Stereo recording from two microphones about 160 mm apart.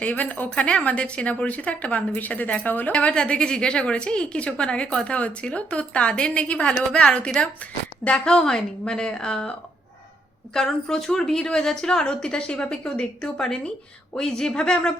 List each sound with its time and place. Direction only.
0.0 s a woman's voice: 10° left (ahead or behind)